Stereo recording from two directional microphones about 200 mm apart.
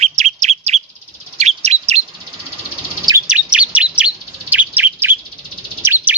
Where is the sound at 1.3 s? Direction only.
35° right (ahead or behind).